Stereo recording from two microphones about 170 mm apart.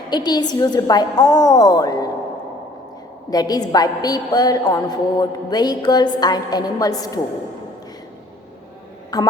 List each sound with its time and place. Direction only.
0.1 s a woman's voice: 25° left (ahead or behind)
3.2 s a woman's voice: 20° left (ahead or behind)
9.1 s a woman's voice: 25° left (ahead or behind)